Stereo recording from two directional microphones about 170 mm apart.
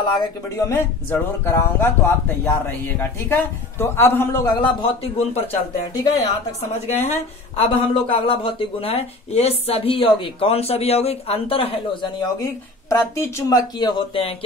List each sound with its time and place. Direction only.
0.6 s speech: 15° left (ahead or behind)
4.6 s a woman's voice: 30° left (ahead or behind)